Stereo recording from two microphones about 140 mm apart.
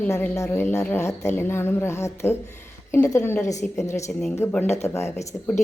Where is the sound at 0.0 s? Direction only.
15° left (ahead or behind).